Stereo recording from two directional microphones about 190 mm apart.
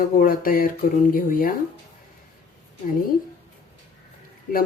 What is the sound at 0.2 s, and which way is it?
Speech, 50° left (ahead or behind).